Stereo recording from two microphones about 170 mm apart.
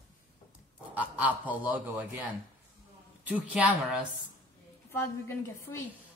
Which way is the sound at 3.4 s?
5° right (ahead or behind).